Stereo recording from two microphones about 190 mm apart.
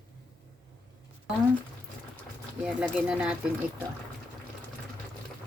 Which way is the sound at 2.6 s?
5° right (ahead or behind).